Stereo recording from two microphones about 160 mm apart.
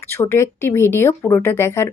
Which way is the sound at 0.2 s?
20° left (ahead or behind).